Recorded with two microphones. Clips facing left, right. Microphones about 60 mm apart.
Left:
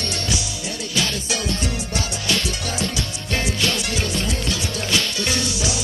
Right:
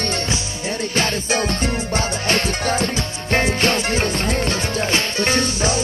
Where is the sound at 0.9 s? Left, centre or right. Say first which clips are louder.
Right 3 dB; right.